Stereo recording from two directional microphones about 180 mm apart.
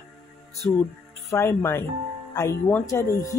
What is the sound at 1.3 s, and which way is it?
Speech, 15° left (ahead or behind).